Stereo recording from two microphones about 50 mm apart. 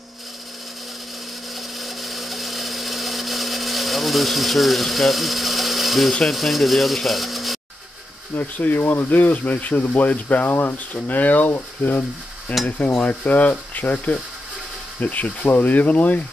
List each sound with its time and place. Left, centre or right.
1.8 s blender: centre
6.2 s speech: centre
8.4 s speech: left
12.6 s stir: left
13.0 s speech: left
15.0 s speech: left